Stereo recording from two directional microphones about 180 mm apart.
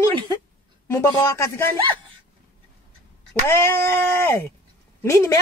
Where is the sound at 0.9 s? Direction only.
15° left (ahead or behind).